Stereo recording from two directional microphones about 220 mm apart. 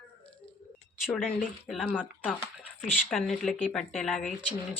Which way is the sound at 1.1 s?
5° left (ahead or behind).